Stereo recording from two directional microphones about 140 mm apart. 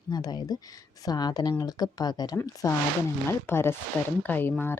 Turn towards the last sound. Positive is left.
turn(degrees=15)  # may be behind; listen again after turning